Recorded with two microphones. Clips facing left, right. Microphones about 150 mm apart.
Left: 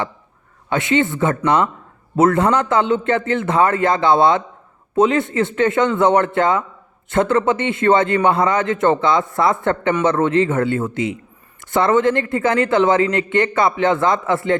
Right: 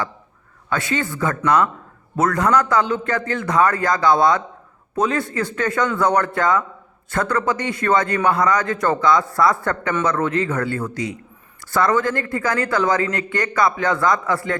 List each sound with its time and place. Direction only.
0.7 s a man's voice: 20° left (ahead or behind)